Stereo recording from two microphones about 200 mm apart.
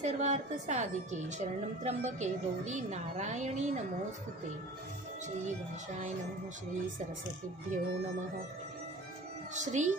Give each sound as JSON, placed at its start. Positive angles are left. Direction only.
{"t": 0.0, "sound": "a woman's voice", "side_deg": -35}
{"t": 7.7, "sound": "a woman's voice", "side_deg": -40}
{"t": 9.5, "sound": "a woman's voice", "side_deg": -35}